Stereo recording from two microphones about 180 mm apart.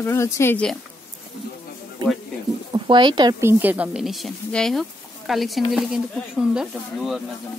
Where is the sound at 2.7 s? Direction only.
25° right (ahead or behind).